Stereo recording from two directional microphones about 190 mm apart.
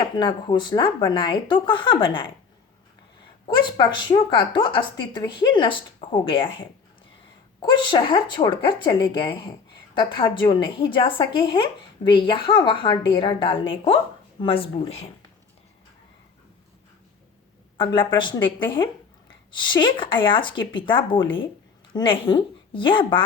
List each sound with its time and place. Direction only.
0.0 s speech: 25° left (ahead or behind)
3.4 s speech: 25° left (ahead or behind)
17.7 s speech: 25° left (ahead or behind)